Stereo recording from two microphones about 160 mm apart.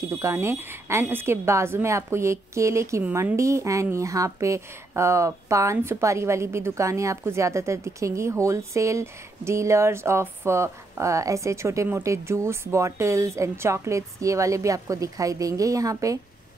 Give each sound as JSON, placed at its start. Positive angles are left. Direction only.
{"t": 0.0, "sound": "a woman's voice", "side_deg": -20}